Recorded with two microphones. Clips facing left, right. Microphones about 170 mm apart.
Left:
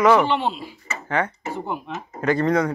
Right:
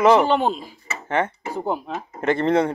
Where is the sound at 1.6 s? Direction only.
35° right (ahead or behind).